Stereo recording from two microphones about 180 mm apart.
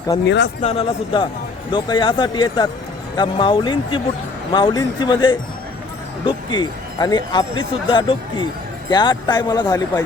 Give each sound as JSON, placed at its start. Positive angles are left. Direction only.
{"t": 0.3, "sound": "speech", "side_deg": 75}
{"t": 0.6, "sound": "speech", "side_deg": 35}